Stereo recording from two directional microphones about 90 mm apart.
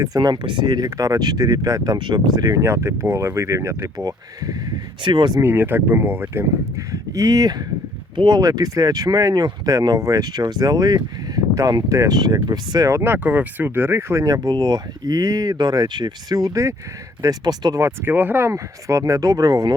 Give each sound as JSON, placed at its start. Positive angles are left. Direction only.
{"t": 0.0, "sound": "speech", "side_deg": -45}
{"t": 2.0, "sound": "speech", "side_deg": -50}
{"t": 3.9, "sound": "speech", "side_deg": -45}
{"t": 5.0, "sound": "speech", "side_deg": -60}
{"t": 5.4, "sound": "speech", "side_deg": -25}
{"t": 6.9, "sound": "speech", "side_deg": -40}
{"t": 8.1, "sound": "speech", "side_deg": -60}
{"t": 8.4, "sound": "speech", "side_deg": -40}
{"t": 12.9, "sound": "speech", "side_deg": -25}
{"t": 14.4, "sound": "speech", "side_deg": -50}
{"t": 17.2, "sound": "speech", "side_deg": -50}
{"t": 17.7, "sound": "speech", "side_deg": -25}
{"t": 18.5, "sound": "speech", "side_deg": -35}